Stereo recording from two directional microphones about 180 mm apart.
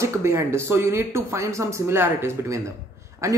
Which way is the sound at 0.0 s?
15° right (ahead or behind).